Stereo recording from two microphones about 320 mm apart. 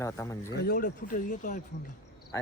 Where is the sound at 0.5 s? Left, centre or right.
Left.